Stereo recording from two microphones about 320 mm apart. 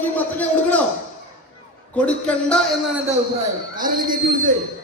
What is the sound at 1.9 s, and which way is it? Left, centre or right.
Speech, centre.